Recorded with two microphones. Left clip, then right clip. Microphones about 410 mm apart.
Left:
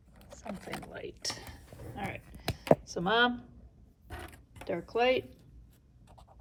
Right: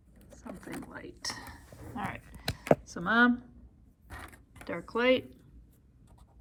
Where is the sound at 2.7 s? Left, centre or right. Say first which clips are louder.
Right 1 dB; centre.